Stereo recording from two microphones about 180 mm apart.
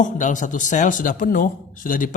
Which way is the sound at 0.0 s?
45° left (ahead or behind).